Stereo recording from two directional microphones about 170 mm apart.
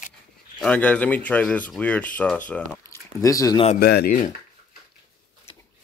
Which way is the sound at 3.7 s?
70° left (ahead or behind).